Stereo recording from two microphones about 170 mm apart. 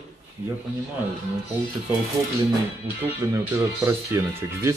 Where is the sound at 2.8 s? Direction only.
15° right (ahead or behind).